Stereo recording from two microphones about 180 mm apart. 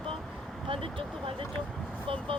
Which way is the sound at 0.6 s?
30° right (ahead or behind).